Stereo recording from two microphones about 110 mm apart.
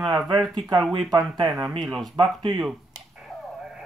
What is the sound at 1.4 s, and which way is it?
Speech, 5° right (ahead or behind).